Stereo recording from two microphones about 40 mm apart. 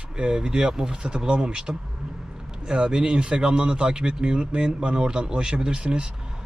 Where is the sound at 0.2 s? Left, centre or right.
Right.